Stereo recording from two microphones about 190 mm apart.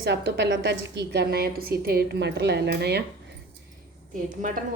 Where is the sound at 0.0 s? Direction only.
70° right (ahead or behind).